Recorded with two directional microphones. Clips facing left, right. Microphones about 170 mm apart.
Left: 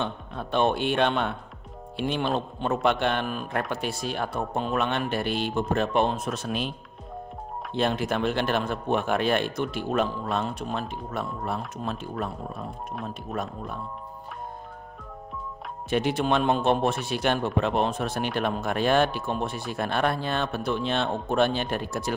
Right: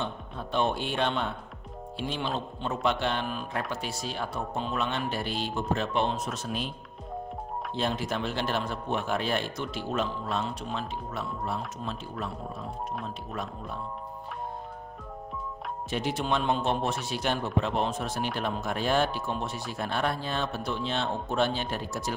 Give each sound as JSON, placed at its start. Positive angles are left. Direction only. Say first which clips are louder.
{"t": 0.0, "sound": "a man's voice", "louder": "left 3 dB", "side_deg": 65}
{"t": 7.7, "sound": "a man's voice", "louder": "left 5 dB", "side_deg": 60}
{"t": 15.9, "sound": "a man's voice", "louder": "left 6 dB", "side_deg": 60}